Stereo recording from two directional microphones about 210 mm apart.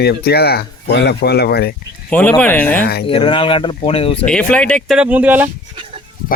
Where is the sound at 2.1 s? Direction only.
5° left (ahead or behind).